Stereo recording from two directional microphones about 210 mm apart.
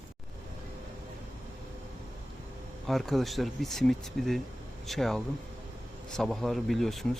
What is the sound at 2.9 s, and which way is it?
Speech, centre (ahead or behind).